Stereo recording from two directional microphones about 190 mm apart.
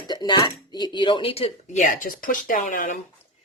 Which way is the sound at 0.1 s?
20° left (ahead or behind).